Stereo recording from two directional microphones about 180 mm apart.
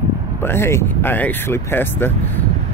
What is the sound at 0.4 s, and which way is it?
Speech, 15° left (ahead or behind).